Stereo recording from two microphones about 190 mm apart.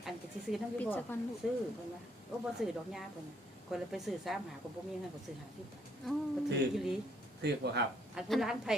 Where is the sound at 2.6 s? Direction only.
Centre (ahead or behind).